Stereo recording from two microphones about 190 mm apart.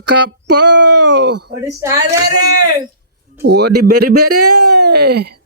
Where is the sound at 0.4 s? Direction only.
65° right (ahead or behind).